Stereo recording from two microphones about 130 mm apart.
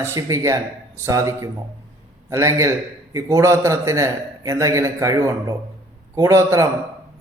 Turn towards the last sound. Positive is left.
turn(degrees=-20)  # may be behind; listen again after turning